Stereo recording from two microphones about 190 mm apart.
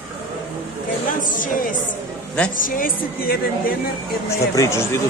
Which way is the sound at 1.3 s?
45° left (ahead or behind).